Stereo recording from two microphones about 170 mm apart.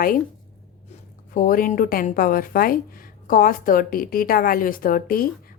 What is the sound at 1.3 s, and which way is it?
A woman's voice, 55° left (ahead or behind).